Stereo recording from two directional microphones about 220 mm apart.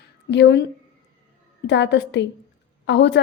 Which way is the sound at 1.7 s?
50° left (ahead or behind).